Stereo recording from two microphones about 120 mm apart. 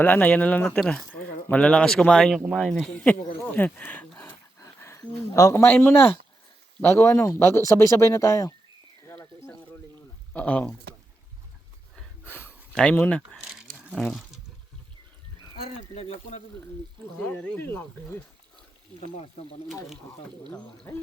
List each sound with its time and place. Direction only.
0.0 s speech: 15° left (ahead or behind)
4.6 s speech: 25° left (ahead or behind)
9.0 s a sound: 20° left (ahead or behind)
10.3 s speech: 10° left (ahead or behind)
12.2 s a sound: 15° left (ahead or behind)
12.7 s speech: 10° left (ahead or behind)
13.3 s a sound: centre (ahead or behind)
16.0 s a man's voice: 60° left (ahead or behind)
17.2 s speech: 10° left (ahead or behind)
20.5 s speech: 10° left (ahead or behind)